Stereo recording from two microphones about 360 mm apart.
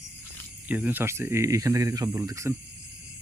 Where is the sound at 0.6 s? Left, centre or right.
Centre.